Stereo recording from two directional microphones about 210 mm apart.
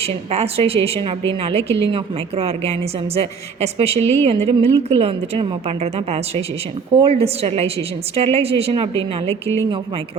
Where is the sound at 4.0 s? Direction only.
10° left (ahead or behind).